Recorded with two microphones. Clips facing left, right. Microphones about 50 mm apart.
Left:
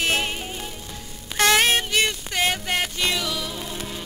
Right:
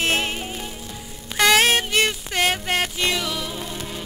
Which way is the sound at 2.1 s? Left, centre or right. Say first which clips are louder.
Right 2 dB; centre.